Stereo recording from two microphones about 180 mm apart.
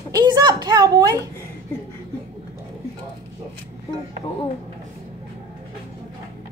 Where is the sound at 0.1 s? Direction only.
25° right (ahead or behind).